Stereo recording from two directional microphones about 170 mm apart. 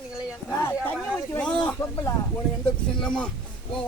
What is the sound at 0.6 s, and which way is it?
Speech, 15° left (ahead or behind).